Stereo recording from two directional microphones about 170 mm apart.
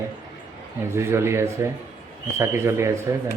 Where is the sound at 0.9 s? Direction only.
15° right (ahead or behind).